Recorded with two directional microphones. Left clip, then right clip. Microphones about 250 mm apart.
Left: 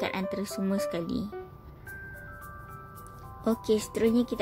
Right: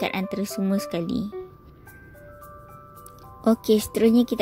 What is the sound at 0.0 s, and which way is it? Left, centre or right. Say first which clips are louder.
A woman's voice: right 4 dB; right.